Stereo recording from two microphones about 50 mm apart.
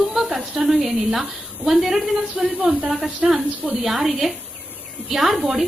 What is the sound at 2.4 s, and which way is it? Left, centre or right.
Speech, right.